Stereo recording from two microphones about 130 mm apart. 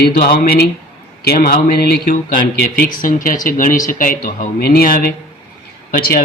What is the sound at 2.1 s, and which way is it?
Speech, 90° left.